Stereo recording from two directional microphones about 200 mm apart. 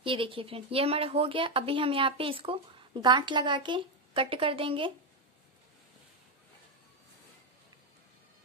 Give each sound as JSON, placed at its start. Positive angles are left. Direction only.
{"t": 0.0, "sound": "speech", "side_deg": -25}